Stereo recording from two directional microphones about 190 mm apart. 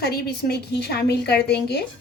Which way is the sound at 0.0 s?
55° left (ahead or behind).